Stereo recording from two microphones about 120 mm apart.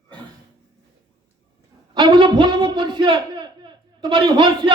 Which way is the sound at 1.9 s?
45° right (ahead or behind).